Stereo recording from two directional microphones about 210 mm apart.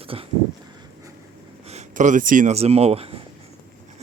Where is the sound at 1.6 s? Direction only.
30° right (ahead or behind).